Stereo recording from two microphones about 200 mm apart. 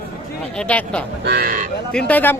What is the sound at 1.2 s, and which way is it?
Speech, 50° right (ahead or behind).